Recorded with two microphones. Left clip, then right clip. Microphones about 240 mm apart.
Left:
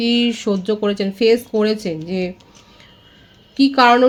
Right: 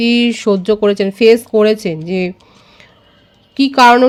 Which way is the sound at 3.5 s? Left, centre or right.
Right.